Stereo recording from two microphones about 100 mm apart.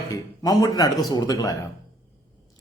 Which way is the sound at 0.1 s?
35° left (ahead or behind).